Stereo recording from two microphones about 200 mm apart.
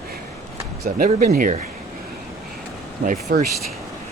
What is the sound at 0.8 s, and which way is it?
Speech, 40° right (ahead or behind).